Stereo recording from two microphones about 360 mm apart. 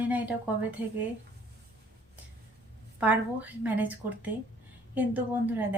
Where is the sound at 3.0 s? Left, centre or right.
Centre.